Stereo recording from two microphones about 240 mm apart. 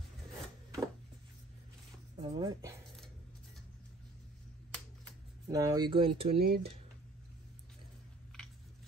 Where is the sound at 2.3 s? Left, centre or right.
Centre.